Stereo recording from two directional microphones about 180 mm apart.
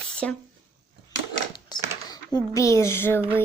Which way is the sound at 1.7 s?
25° left (ahead or behind).